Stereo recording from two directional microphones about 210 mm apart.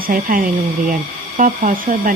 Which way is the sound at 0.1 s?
40° right (ahead or behind).